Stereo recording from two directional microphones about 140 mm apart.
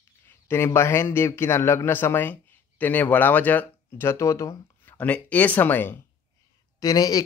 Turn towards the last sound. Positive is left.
turn(degrees=25)  # may be behind; listen again after turning